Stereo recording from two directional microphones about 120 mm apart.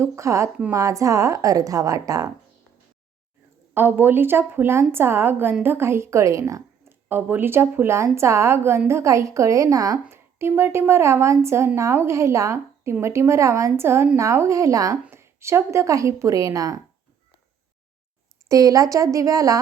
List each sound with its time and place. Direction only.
0.0 s a woman's voice: 25° right (ahead or behind)
3.8 s a woman's voice: 15° right (ahead or behind)
18.4 s a woman's voice: 30° right (ahead or behind)